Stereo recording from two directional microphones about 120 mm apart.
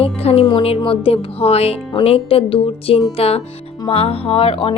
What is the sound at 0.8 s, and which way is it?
A woman's voice, 50° left (ahead or behind).